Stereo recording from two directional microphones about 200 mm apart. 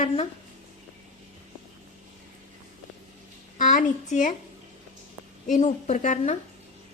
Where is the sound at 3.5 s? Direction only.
40° left (ahead or behind).